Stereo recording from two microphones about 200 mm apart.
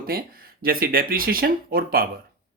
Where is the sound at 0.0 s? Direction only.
50° right (ahead or behind).